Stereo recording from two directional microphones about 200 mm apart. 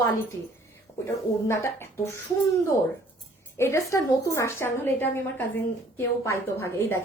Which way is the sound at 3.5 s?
15° left (ahead or behind).